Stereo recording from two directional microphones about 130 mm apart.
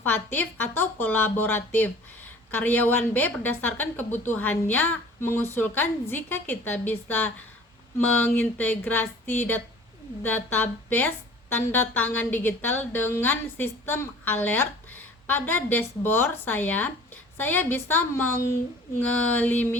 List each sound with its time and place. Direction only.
0.0 s a woman's voice: 15° left (ahead or behind)